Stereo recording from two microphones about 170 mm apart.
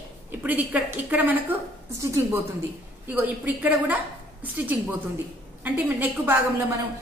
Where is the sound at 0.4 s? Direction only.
10° right (ahead or behind).